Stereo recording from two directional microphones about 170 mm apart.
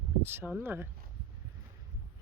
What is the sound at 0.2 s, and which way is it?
Speech, 15° right (ahead or behind).